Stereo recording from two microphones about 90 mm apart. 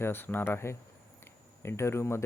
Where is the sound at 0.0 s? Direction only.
25° left (ahead or behind).